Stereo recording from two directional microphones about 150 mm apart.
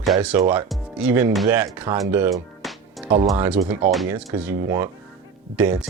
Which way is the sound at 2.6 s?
Centre (ahead or behind).